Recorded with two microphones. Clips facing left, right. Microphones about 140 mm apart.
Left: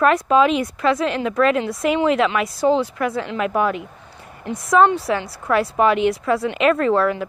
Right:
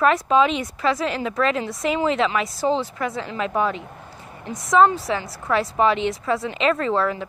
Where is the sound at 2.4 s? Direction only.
Centre (ahead or behind).